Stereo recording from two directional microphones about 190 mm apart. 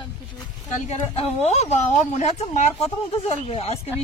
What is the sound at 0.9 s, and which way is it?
Speech, 35° left (ahead or behind).